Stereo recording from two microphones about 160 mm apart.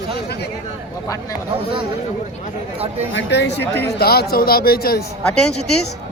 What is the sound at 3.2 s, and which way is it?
Speech, 90° left.